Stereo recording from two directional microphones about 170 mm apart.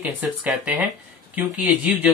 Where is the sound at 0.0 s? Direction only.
5° right (ahead or behind).